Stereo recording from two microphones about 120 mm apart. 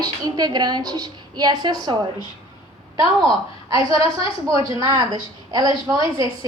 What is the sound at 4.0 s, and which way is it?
A woman's voice, 30° right (ahead or behind).